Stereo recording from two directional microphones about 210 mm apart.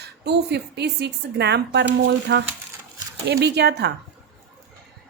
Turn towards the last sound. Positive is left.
turn(degrees=-50)  # may be behind; listen again after turning